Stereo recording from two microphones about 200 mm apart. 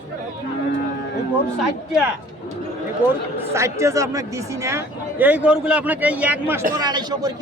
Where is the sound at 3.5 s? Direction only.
15° right (ahead or behind).